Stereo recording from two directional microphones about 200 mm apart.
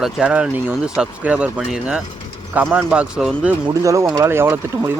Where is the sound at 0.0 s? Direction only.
5° right (ahead or behind).